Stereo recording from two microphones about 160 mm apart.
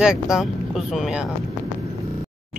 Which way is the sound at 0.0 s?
5° right (ahead or behind).